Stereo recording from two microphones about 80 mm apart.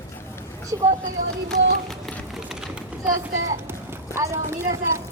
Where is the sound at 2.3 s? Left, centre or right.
Centre.